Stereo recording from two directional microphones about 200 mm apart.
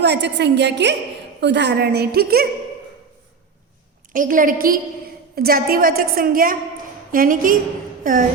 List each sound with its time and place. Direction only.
0.0 s a woman's voice: 60° right (ahead or behind)
4.1 s a woman's voice: 40° right (ahead or behind)
8.0 s a sound: 40° right (ahead or behind)